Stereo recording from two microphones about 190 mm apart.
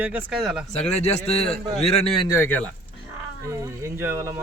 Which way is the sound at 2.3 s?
10° left (ahead or behind).